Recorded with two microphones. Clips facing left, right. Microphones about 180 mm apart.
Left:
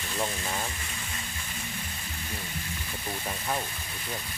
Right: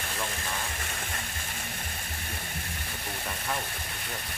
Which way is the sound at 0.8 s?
65° right (ahead or behind).